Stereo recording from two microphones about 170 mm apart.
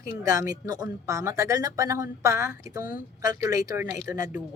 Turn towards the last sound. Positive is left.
turn(degrees=-20)  # may be behind; listen again after turning